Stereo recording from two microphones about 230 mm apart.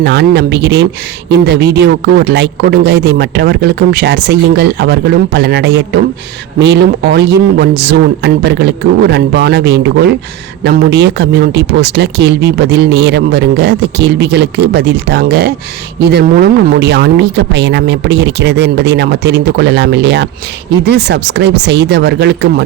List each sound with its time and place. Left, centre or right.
0.0 s speech: right